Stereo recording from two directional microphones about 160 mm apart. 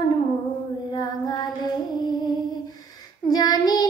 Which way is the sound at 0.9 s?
25° left (ahead or behind).